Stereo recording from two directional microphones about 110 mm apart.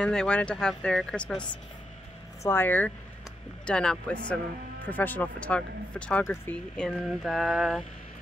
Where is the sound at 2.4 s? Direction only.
20° left (ahead or behind).